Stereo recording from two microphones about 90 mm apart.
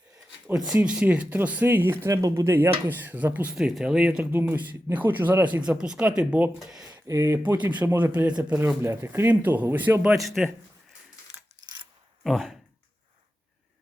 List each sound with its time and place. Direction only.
0.7 s speech: 10° right (ahead or behind)
2.0 s speech: 35° right (ahead or behind); by 3.5 s 20° right (ahead or behind)
3.5 s speech: 5° right (ahead or behind)
6.8 s a sound: 40° right (ahead or behind)
7.3 s speech: 20° right (ahead or behind)
8.5 s speech: 30° right (ahead or behind)
10.1 s speech: centre (ahead or behind)
12.2 s speech: centre (ahead or behind)